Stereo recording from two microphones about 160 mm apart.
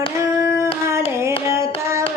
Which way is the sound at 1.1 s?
15° right (ahead or behind).